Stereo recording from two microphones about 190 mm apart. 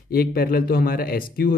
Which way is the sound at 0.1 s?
55° left (ahead or behind).